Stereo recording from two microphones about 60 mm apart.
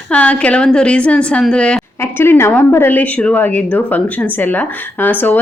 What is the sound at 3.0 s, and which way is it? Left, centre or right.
A woman's voice, left.